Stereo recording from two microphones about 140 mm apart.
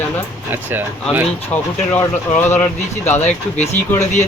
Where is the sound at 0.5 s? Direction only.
15° right (ahead or behind).